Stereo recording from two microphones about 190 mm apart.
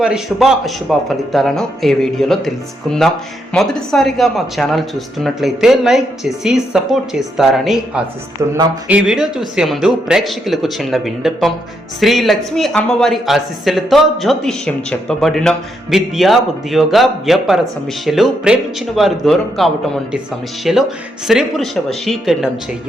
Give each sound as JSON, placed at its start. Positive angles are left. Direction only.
{"t": 0.0, "sound": "speech", "side_deg": -5}
{"t": 3.5, "sound": "speech", "side_deg": 0}
{"t": 8.4, "sound": "speech", "side_deg": -20}
{"t": 8.9, "sound": "speech", "side_deg": -5}